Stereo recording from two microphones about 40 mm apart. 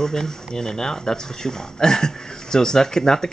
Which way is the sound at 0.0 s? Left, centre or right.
Centre.